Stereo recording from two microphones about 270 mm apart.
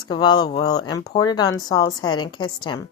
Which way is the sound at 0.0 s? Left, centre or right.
Centre.